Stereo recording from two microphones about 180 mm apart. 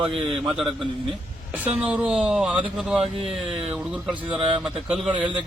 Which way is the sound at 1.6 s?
10° right (ahead or behind).